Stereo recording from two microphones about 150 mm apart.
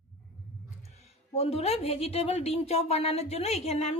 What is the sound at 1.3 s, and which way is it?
Speech, 45° left (ahead or behind).